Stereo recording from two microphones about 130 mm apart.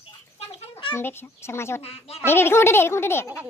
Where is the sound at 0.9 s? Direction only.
15° left (ahead or behind).